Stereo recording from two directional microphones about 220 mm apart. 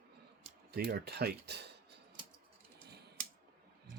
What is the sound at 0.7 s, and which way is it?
Speech, 45° right (ahead or behind).